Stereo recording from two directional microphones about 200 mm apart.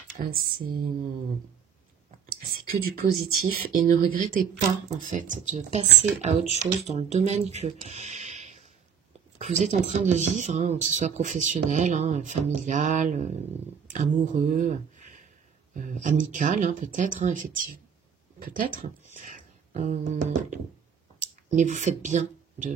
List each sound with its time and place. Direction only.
0.2 s speech: 45° right (ahead or behind)
2.0 s whispering: 35° right (ahead or behind)
3.5 s speech: 45° right (ahead or behind)